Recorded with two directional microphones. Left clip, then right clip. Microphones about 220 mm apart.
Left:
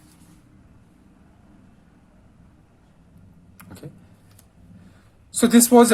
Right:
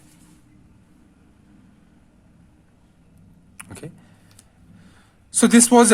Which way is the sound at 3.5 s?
40° right (ahead or behind).